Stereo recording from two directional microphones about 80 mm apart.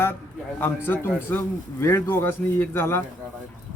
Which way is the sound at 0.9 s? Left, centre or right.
Left.